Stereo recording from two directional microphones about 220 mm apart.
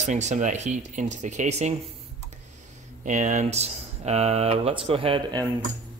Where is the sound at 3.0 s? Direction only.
35° right (ahead or behind).